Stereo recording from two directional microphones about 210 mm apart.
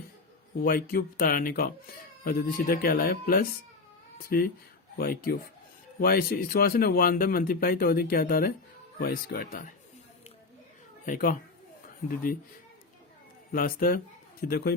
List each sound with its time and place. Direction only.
0.6 s speech: 45° left (ahead or behind)
11.0 s speech: 40° left (ahead or behind)
13.5 s speech: 45° left (ahead or behind)